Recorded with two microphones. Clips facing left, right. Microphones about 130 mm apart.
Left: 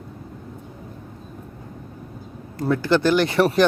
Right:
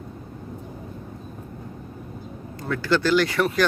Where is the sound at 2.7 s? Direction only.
20° left (ahead or behind).